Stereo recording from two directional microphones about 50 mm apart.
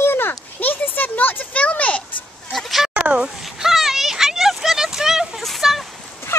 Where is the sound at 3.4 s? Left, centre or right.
Centre.